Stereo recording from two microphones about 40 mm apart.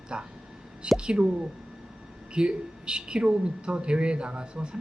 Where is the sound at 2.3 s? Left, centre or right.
Right.